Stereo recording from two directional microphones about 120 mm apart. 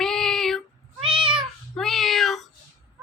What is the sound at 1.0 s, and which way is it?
Cat, 45° right (ahead or behind).